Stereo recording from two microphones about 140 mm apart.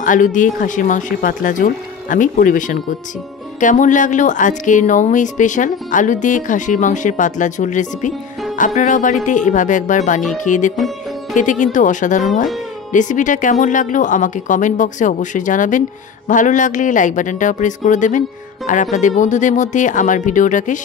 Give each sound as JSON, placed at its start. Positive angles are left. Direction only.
{"t": 0.0, "sound": "speech", "side_deg": 70}